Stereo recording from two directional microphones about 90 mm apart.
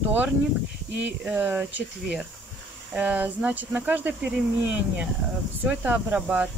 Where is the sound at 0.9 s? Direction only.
15° right (ahead or behind).